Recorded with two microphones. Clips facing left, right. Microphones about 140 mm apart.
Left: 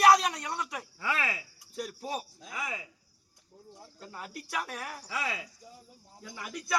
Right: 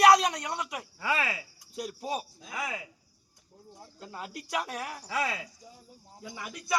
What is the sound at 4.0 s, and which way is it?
Speech, 20° right (ahead or behind).